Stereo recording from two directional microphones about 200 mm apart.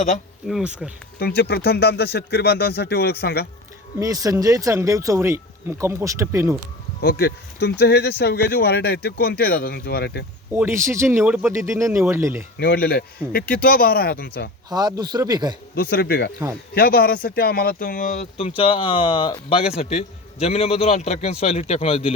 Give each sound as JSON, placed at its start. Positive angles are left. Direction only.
{"t": 0.4, "sound": "speech", "side_deg": 0}
{"t": 1.2, "sound": "speech", "side_deg": 50}
{"t": 4.0, "sound": "speech", "side_deg": -15}
{"t": 7.0, "sound": "speech", "side_deg": 50}
{"t": 10.5, "sound": "speech", "side_deg": -10}
{"t": 12.5, "sound": "speech", "side_deg": 50}
{"t": 14.7, "sound": "speech", "side_deg": -20}
{"t": 15.7, "sound": "speech", "side_deg": 50}